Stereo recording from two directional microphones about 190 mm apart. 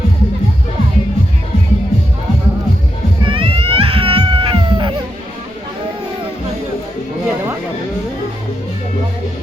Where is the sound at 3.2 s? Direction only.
25° right (ahead or behind).